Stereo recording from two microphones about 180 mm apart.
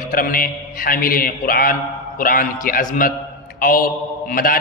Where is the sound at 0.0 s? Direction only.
50° left (ahead or behind).